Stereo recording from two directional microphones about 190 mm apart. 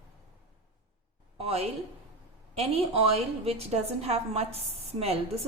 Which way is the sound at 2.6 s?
30° right (ahead or behind).